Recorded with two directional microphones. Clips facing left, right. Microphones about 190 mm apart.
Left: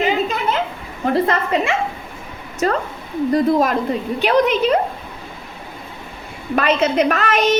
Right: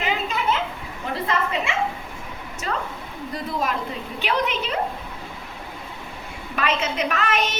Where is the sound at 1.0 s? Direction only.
45° left (ahead or behind).